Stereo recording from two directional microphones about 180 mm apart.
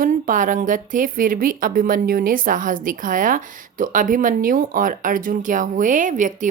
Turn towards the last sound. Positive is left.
turn(degrees=-45)  # may be behind; listen again after turning